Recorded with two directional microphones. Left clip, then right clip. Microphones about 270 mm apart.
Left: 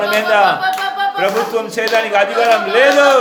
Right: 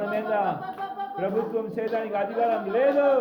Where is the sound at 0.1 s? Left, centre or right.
Centre.